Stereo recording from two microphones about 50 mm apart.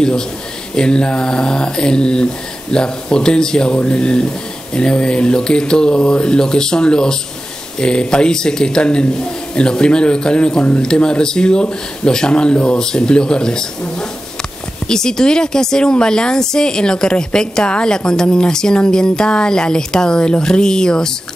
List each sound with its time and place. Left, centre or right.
0.7 s speech: centre